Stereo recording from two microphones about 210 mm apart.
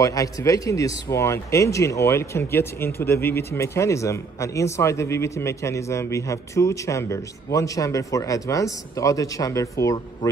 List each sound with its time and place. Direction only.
0.0 s a man's voice: 15° left (ahead or behind)